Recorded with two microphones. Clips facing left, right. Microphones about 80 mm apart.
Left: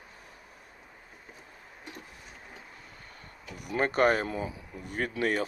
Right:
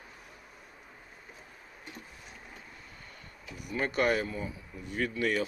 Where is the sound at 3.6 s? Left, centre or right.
Left.